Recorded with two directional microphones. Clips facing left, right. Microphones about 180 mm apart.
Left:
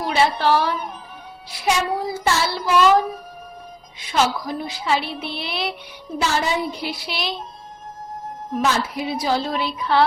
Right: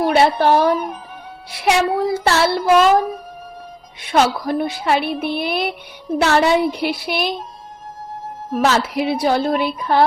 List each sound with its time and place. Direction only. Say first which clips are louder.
0.0 s a woman's voice: right 5 dB; 55° right (ahead or behind)
1.5 s a woman's voice: right 5 dB; 65° right (ahead or behind)
4.0 s a woman's voice: right 4 dB; 60° right (ahead or behind)
6.1 s a woman's voice: right 7 dB; 70° right (ahead or behind)
8.5 s a woman's voice: right 5 dB; 70° right (ahead or behind); by 10.1 s 50° right (ahead or behind)